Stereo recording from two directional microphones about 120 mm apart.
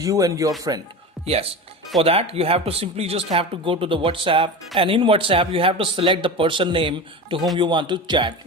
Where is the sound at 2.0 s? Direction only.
55° right (ahead or behind).